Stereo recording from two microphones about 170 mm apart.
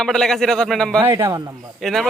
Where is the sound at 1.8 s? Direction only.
Centre (ahead or behind).